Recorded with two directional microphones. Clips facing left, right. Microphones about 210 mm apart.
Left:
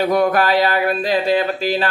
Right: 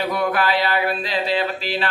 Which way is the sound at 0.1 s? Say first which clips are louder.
Left 5 dB; 45° left (ahead or behind).